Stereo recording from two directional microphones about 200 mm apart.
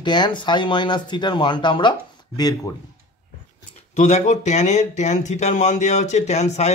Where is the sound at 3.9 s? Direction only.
35° left (ahead or behind).